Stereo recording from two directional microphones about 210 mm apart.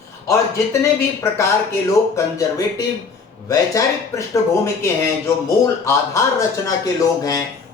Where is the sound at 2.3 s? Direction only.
15° left (ahead or behind).